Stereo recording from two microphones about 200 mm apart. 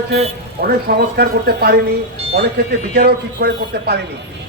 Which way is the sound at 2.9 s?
50° right (ahead or behind).